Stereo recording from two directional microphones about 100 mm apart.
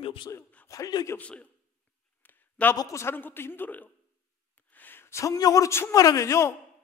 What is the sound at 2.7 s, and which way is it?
A man's voice, 30° left (ahead or behind).